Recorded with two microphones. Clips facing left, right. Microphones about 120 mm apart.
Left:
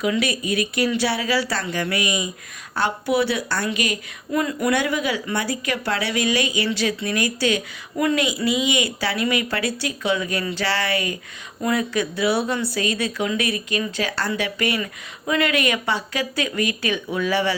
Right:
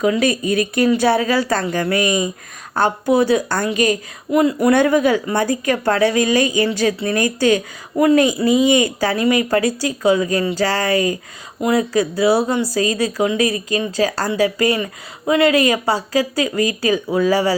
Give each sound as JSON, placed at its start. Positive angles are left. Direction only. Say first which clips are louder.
{"t": 0.0, "sound": "a woman's voice", "louder": "right 6 dB", "side_deg": -40}
{"t": 4.3, "sound": "speech", "louder": "right 7 dB", "side_deg": -25}
{"t": 4.7, "sound": "a woman's voice", "louder": "right 9 dB", "side_deg": -50}
{"t": 7.9, "sound": "speech", "louder": "right 8 dB", "side_deg": -30}
{"t": 8.2, "sound": "speech", "louder": "right 7 dB", "side_deg": -45}